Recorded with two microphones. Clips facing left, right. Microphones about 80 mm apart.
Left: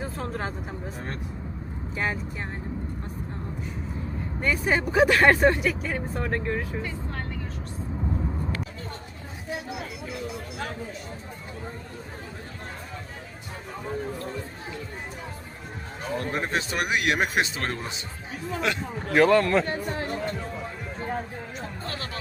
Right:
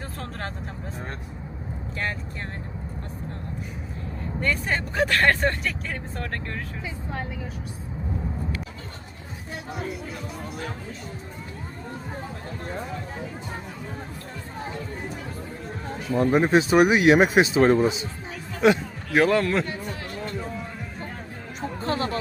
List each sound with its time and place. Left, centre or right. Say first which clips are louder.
0.0 s vehicle: left 3 dB; centre
4.4 s speech: left 2 dB; centre
6.8 s speech: right 1 dB; centre
16.1 s speech: right 9 dB; centre
19.1 s speech: left 1 dB; centre
19.9 s music: left 4 dB; left
21.6 s music: right 11 dB; right